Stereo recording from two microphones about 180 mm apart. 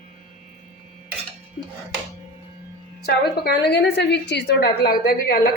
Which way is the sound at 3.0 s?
60° left (ahead or behind).